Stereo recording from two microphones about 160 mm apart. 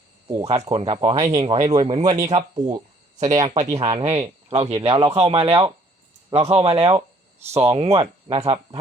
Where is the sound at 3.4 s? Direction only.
45° right (ahead or behind).